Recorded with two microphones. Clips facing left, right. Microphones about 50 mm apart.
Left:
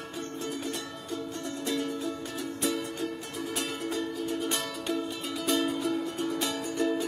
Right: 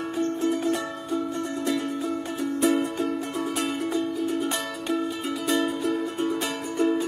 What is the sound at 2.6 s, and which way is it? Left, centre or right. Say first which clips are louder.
Music: right 9 dB; right.